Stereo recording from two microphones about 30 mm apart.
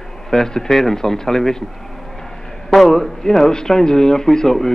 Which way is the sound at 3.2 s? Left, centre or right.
Centre.